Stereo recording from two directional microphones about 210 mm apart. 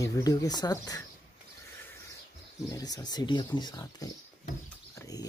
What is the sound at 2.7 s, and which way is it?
Speech, 15° left (ahead or behind).